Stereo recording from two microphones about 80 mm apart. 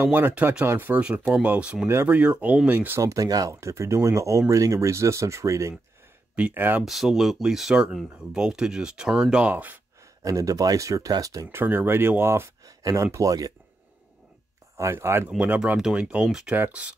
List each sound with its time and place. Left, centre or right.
0.0 s speech: right
3.0 s speech: right
6.3 s speech: right
6.8 s speech: centre
9.5 s speech: right
10.2 s speech: right
11.5 s speech: right
12.6 s speech: right
14.8 s speech: right
15.2 s speech: centre